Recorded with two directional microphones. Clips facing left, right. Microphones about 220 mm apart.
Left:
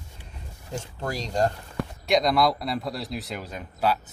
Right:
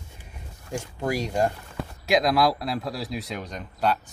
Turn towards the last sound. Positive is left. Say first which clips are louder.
# even
turn(degrees=5)  # may be behind; listen again after turning